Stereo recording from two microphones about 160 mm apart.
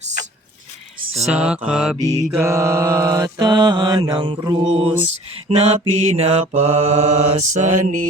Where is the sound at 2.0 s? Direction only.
45° right (ahead or behind).